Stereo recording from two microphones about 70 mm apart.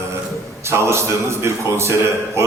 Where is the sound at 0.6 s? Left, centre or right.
Right.